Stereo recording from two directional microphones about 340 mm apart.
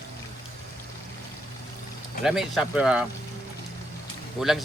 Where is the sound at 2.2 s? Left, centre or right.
Centre.